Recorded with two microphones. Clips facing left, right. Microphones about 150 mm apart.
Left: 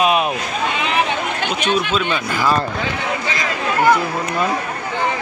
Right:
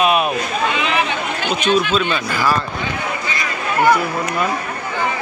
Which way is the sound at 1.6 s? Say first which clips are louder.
Right 3 dB; 15° left (ahead or behind).